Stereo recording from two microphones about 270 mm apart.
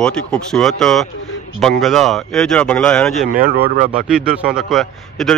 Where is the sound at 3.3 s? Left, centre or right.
Right.